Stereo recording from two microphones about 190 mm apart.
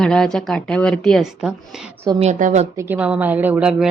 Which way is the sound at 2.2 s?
40° right (ahead or behind).